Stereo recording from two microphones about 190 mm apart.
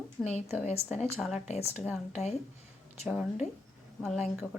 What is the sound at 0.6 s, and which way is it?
Speech, 35° left (ahead or behind).